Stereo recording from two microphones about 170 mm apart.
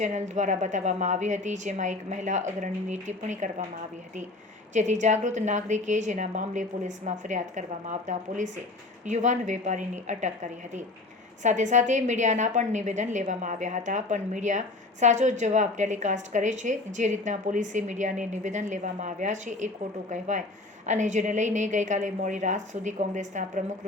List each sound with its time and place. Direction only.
0.0 s a woman's voice: 45° right (ahead or behind)
4.7 s a woman's voice: 45° right (ahead or behind)